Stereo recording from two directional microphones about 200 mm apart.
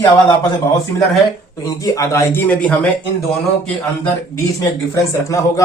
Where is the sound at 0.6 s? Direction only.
15° left (ahead or behind).